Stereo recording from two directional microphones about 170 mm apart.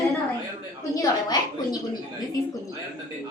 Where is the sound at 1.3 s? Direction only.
25° left (ahead or behind).